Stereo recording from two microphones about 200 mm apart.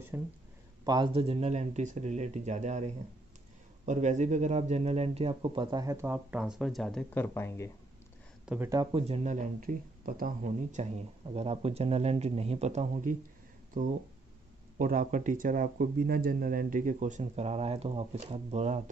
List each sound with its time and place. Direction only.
0.1 s speech: 10° right (ahead or behind)
0.8 s speech: 25° right (ahead or behind); by 7.7 s 15° left (ahead or behind)
8.5 s speech: 15° right (ahead or behind)
8.9 s speech: 30° right (ahead or behind)